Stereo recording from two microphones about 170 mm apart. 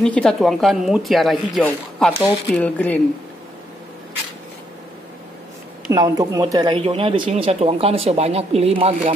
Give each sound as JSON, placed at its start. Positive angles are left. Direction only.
{"t": 0.0, "sound": "speech", "side_deg": 5}
{"t": 5.9, "sound": "speech", "side_deg": -20}